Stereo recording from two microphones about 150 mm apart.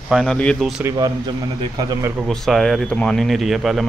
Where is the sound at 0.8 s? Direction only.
20° right (ahead or behind).